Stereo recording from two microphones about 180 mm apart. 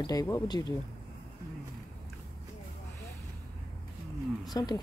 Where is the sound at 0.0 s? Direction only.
20° left (ahead or behind).